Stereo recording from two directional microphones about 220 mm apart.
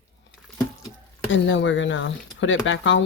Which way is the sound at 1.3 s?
55° left (ahead or behind).